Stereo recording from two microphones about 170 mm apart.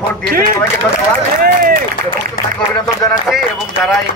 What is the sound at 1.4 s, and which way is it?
Speech, 55° right (ahead or behind).